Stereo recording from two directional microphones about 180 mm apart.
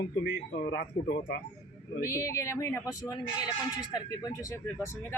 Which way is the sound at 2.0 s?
15° left (ahead or behind).